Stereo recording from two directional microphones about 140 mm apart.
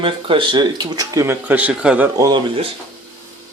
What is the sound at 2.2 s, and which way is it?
Speech, 30° right (ahead or behind).